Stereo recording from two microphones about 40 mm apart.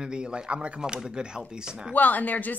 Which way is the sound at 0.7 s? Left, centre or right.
Centre.